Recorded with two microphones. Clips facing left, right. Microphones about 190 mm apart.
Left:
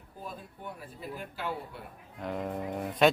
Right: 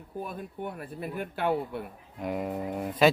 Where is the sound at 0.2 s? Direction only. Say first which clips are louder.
Right 7 dB; 60° right (ahead or behind).